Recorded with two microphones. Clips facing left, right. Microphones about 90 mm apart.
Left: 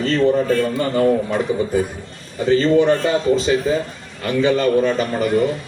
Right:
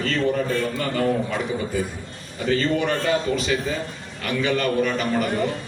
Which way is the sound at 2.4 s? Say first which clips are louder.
Left 7 dB; 25° left (ahead or behind).